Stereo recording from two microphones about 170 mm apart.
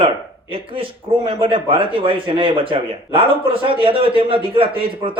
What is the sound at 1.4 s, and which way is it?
Speech, 30° right (ahead or behind).